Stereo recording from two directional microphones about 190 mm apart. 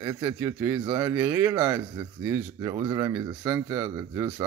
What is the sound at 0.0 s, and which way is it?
Speech, 15° right (ahead or behind).